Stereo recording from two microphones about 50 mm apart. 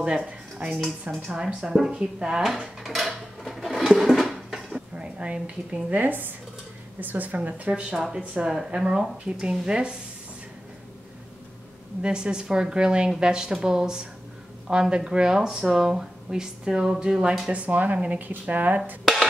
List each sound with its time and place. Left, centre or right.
0.0 s dishes: centre
1.2 s speech: centre
2.8 s dishes: centre
4.1 s a sound: centre
4.9 s a woman's voice: right
7.9 s speech: centre
12.0 s speech: centre
17.5 s a woman's voice: right